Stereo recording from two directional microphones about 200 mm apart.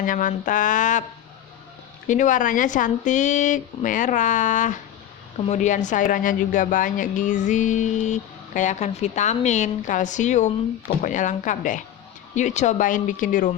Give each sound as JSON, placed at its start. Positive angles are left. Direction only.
{"t": 0.0, "sound": "a woman's voice", "side_deg": 40}
{"t": 2.0, "sound": "a woman's voice", "side_deg": 40}